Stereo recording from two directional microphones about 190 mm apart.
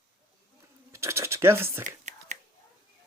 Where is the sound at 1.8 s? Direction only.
40° right (ahead or behind).